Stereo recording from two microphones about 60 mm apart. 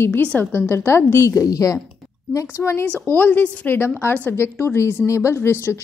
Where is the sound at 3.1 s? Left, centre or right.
Left.